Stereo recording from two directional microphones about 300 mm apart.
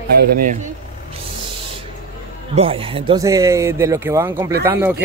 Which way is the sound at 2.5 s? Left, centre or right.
Centre.